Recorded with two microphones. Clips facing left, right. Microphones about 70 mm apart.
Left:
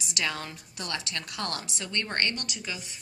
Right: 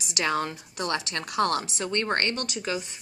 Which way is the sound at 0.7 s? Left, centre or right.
Right.